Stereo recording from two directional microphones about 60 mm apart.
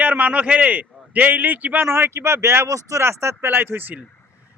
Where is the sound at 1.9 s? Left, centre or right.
Right.